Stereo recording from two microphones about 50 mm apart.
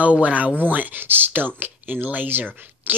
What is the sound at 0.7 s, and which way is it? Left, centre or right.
Speech, right.